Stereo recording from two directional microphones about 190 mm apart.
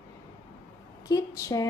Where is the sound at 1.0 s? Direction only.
20° left (ahead or behind).